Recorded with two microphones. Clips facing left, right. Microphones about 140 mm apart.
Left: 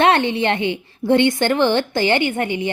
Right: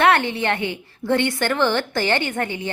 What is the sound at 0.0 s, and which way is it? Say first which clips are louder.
A woman's voice: left 2 dB; 20° left (ahead or behind).